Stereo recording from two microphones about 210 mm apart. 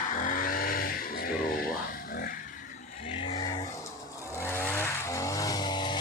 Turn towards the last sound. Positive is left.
turn(degrees=20)  # may be behind; listen again after turning